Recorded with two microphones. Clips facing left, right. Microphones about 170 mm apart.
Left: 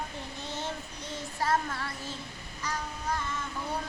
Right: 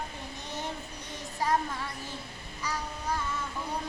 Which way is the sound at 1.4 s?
15° right (ahead or behind).